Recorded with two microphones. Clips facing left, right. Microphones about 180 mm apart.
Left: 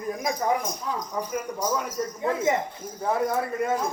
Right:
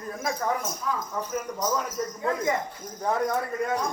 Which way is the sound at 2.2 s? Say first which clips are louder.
Left 2 dB; 25° left (ahead or behind).